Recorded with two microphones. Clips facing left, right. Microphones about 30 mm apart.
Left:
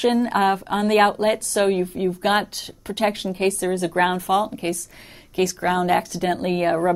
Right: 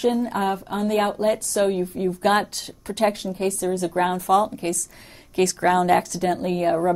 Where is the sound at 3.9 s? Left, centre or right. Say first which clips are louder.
Right 1 dB; left.